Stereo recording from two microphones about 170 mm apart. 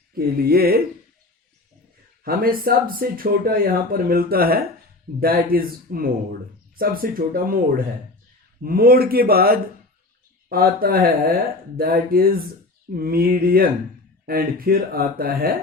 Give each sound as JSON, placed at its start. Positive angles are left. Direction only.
{"t": 0.1, "sound": "speech", "side_deg": -60}
{"t": 2.2, "sound": "speech", "side_deg": -60}
{"t": 8.6, "sound": "speech", "side_deg": -60}